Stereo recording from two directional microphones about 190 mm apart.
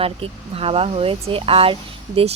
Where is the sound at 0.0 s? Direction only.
30° right (ahead or behind).